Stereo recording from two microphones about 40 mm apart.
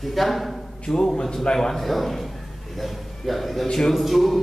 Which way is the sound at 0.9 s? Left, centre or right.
Centre.